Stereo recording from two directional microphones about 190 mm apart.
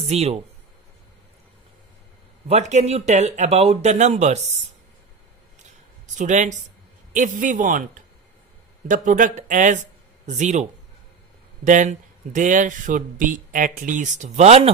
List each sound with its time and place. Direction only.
0.0 s speech: 35° right (ahead or behind)
2.5 s speech: 35° right (ahead or behind)
6.1 s speech: 40° right (ahead or behind)